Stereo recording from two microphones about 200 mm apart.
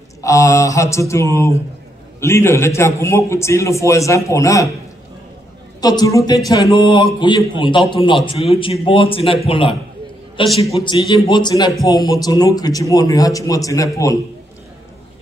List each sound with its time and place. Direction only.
0.2 s a man's voice: 15° left (ahead or behind)
5.8 s a man's voice: 20° left (ahead or behind)